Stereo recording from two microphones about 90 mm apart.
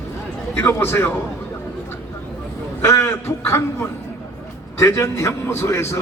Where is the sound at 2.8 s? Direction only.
30° left (ahead or behind).